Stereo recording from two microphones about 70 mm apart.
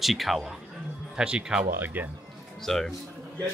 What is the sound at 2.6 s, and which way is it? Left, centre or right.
Speech, centre.